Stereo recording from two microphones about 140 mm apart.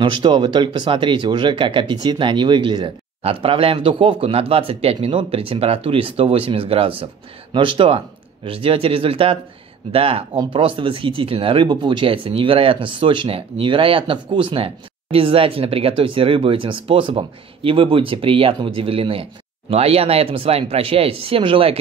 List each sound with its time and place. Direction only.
0.0 s speech: 35° right (ahead or behind)